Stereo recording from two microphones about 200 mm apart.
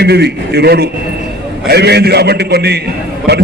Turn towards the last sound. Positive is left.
turn(degrees=-55)  # may be behind; listen again after turning